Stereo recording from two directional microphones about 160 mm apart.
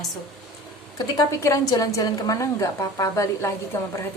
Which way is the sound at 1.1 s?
20° left (ahead or behind).